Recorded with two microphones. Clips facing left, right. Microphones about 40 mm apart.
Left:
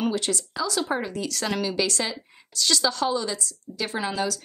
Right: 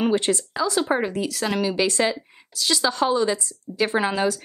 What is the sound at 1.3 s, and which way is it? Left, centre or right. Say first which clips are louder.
Speech: right 3 dB; centre.